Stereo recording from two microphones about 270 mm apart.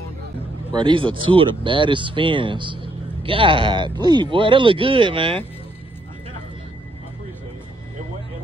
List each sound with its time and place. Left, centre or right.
0.7 s speech: centre